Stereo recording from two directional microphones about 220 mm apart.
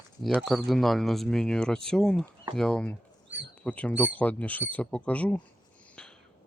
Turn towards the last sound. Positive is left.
turn(degrees=5)  # may be behind; listen again after turning